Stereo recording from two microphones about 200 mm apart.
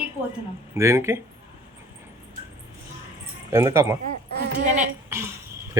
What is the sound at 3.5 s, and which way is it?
Speech, 15° right (ahead or behind).